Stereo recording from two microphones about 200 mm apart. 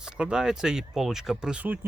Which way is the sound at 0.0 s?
5° right (ahead or behind).